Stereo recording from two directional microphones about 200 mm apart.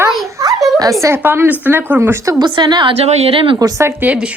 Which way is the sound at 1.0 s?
10° right (ahead or behind).